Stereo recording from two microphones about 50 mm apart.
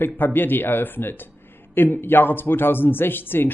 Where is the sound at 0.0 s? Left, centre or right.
Left.